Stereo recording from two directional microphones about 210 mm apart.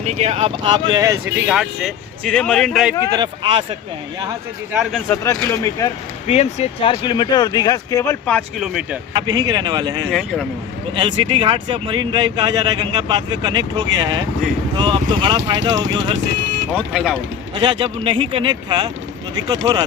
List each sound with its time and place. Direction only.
0.0 s speech: 30° right (ahead or behind); by 1.2 s 15° right (ahead or behind)
1.4 s speech: 5° right (ahead or behind)
3.1 s speech: 20° right (ahead or behind)
4.8 s speech: centre (ahead or behind)
6.2 s speech: 30° left (ahead or behind); by 9.0 s centre (ahead or behind)
9.1 s speech: 20° right (ahead or behind)
10.1 s speech: centre (ahead or behind)
10.9 s speech: 25° right (ahead or behind)
16.7 s speech: centre (ahead or behind)
17.5 s speech: 25° right (ahead or behind)